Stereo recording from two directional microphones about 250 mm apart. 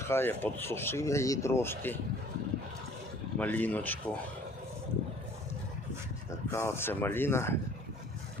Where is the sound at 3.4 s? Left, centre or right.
Centre.